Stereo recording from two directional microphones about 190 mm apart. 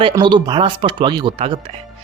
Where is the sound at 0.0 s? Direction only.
25° right (ahead or behind).